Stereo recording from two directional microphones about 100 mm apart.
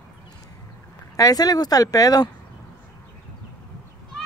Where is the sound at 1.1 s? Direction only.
35° left (ahead or behind).